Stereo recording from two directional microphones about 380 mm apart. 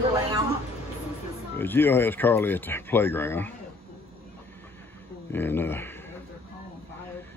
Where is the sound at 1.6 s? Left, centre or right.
Centre.